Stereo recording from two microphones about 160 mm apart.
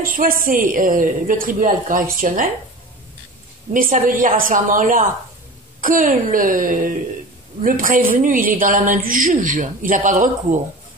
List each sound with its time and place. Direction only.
0.0 s a woman's voice: 60° right (ahead or behind)
3.7 s a woman's voice: 60° right (ahead or behind)